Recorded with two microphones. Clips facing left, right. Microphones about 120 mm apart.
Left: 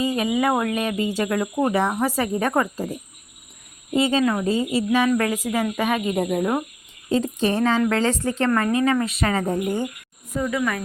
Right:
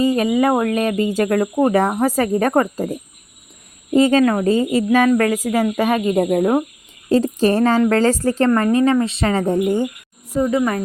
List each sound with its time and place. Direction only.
0.0 s speech: 40° right (ahead or behind); by 9.9 s 20° right (ahead or behind)
10.3 s speech: 30° right (ahead or behind)